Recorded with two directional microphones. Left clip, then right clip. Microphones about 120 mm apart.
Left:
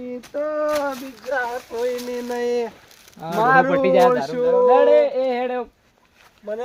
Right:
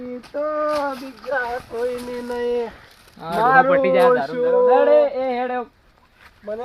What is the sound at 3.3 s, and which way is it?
Speech, 45° left (ahead or behind).